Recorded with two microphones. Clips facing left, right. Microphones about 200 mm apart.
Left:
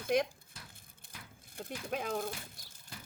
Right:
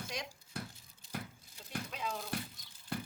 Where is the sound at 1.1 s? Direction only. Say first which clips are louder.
Right 11 dB; 60° right (ahead or behind).